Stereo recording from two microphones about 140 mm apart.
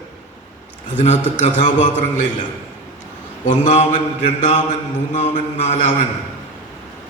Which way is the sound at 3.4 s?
60° left (ahead or behind).